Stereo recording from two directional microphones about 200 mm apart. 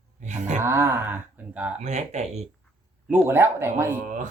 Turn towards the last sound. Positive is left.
turn(degrees=-40)  # may be behind; listen again after turning